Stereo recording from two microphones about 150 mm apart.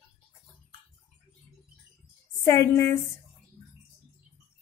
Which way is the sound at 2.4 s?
20° left (ahead or behind).